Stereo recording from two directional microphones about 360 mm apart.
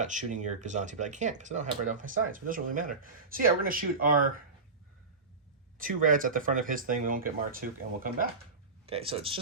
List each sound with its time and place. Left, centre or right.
0.0 s speech: right
5.7 s speech: right